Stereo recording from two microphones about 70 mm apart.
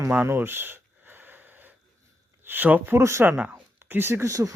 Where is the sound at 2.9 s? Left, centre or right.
Right.